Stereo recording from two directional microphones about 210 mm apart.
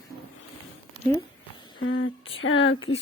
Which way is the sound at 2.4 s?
65° left (ahead or behind).